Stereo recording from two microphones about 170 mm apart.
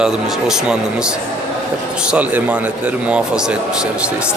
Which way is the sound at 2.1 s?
10° right (ahead or behind).